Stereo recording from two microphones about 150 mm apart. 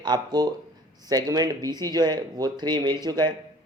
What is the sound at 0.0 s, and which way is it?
A man's voice, 30° right (ahead or behind).